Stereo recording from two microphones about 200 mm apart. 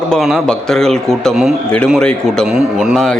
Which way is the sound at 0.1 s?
Centre (ahead or behind).